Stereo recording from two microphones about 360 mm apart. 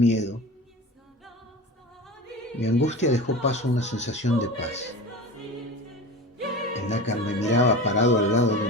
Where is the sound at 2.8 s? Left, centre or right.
Centre.